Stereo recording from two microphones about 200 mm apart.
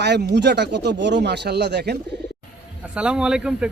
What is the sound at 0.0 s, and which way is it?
Speech, 60° right (ahead or behind).